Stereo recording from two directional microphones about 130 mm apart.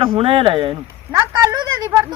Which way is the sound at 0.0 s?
40° right (ahead or behind).